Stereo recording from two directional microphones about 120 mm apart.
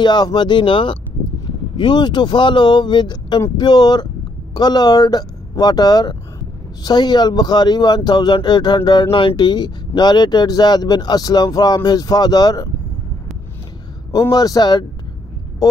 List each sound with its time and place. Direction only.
0.0 s speech: 40° left (ahead or behind)
14.3 s speech: 35° left (ahead or behind)
15.6 s hum: 30° left (ahead or behind)